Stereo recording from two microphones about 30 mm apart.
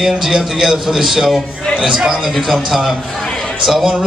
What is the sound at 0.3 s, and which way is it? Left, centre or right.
A man's voice, centre.